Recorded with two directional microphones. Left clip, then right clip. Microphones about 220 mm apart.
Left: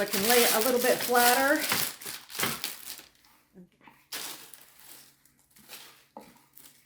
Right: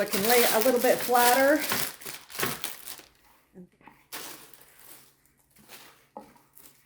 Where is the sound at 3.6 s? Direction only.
30° right (ahead or behind).